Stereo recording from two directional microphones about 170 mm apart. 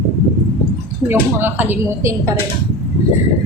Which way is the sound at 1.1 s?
10° right (ahead or behind).